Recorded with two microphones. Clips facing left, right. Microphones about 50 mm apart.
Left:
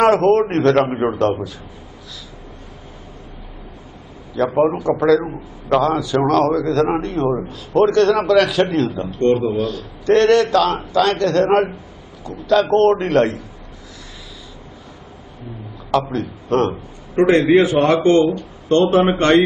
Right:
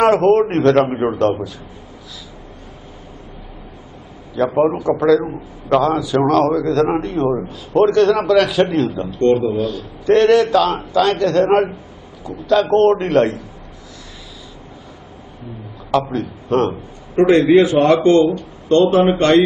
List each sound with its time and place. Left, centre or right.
0.0 s a man's voice: centre
4.5 s a man's voice: centre
15.9 s a man's voice: centre
18.3 s speech: left